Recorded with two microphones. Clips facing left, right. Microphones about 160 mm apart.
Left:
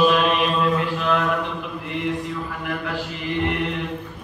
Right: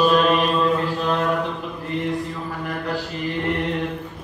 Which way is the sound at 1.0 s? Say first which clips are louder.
Even; 35° right (ahead or behind).